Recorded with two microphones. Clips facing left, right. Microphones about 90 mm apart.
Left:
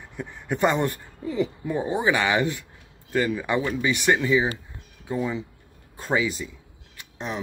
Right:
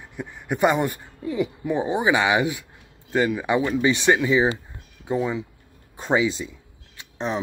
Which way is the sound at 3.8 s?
30° right (ahead or behind).